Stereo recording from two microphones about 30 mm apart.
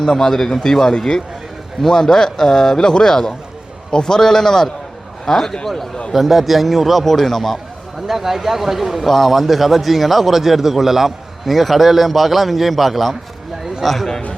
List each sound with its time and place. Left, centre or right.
0.0 s a man's voice: centre
6.1 s a man's voice: centre
7.0 s a man's voice: centre
8.0 s a man's voice: centre
9.0 s a man's voice: centre